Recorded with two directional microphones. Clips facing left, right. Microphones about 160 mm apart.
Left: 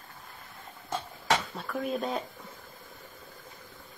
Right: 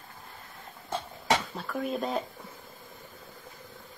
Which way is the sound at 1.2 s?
Centre (ahead or behind).